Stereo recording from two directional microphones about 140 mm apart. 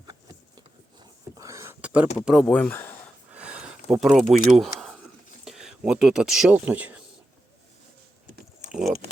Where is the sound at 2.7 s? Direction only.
15° left (ahead or behind).